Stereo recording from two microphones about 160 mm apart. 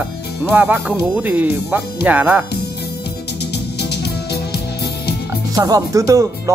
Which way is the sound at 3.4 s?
90° left.